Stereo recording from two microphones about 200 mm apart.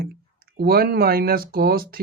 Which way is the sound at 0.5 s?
50° right (ahead or behind).